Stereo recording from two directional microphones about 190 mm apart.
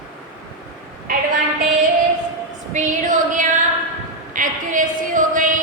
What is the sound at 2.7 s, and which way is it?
Female singing, 40° right (ahead or behind).